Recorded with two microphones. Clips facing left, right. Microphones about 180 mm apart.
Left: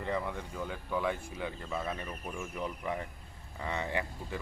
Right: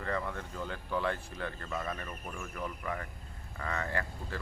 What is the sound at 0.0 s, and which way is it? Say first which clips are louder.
Speech: left 1 dB; 15° left (ahead or behind).